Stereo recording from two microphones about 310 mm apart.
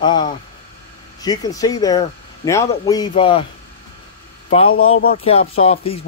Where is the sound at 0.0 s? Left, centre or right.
Centre.